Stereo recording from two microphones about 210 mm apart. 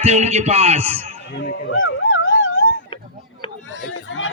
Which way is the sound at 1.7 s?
65° left (ahead or behind).